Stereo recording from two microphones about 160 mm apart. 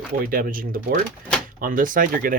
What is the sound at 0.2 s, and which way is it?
Speech, 65° right (ahead or behind).